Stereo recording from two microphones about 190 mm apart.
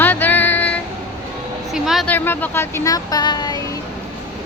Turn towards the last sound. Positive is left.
turn(degrees=20)  # may be behind; listen again after turning